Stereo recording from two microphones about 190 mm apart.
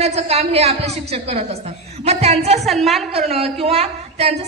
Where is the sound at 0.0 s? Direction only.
35° right (ahead or behind).